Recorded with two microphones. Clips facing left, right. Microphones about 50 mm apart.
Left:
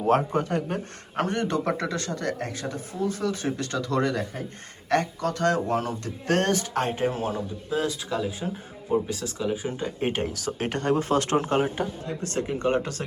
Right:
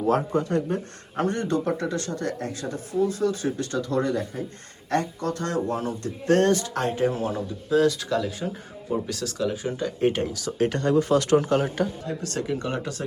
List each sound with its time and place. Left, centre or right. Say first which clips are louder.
0.3 s speech: right 2 dB; left
1.5 s speech: right 1 dB; left
2.0 s speech: even; left
3.9 s speech: even; left
4.9 s speech: left 1 dB; left
7.7 s speech: right 7 dB; centre
9.8 s speech: right 6 dB; left
10.2 s speech: right 4 dB; left